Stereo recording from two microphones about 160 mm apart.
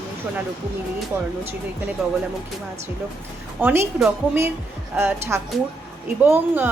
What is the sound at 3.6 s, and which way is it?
A woman's voice, 10° right (ahead or behind).